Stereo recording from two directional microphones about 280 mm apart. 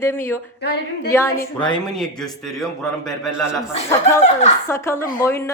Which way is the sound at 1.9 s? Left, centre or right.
Centre.